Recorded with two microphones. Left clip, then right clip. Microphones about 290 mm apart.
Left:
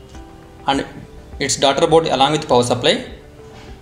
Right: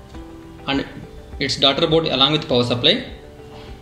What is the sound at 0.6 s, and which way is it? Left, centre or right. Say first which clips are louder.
Speech: left 4 dB; left.